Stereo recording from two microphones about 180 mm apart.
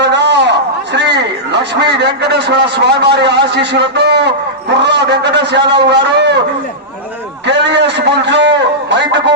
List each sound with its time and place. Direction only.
0.0 s a sound: 75° right (ahead or behind)
0.9 s a man's voice: 75° right (ahead or behind)
7.4 s a man's voice: 75° right (ahead or behind)